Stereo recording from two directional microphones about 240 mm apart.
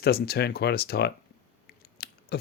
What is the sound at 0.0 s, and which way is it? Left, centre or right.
Speech, left.